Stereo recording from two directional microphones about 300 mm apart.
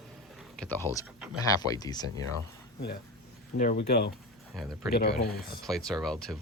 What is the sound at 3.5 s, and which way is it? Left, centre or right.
Speech, left.